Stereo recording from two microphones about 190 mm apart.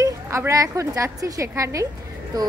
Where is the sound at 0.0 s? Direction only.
15° right (ahead or behind).